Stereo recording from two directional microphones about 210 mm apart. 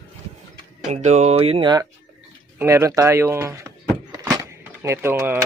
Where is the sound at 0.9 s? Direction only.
30° right (ahead or behind); by 2.9 s 10° right (ahead or behind).